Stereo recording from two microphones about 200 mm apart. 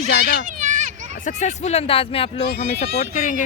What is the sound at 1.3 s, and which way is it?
Speech, 35° left (ahead or behind).